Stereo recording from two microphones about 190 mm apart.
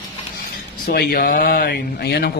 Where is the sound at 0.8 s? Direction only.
55° left (ahead or behind).